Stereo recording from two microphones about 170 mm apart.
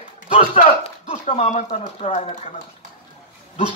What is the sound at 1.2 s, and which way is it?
Speech, 45° left (ahead or behind).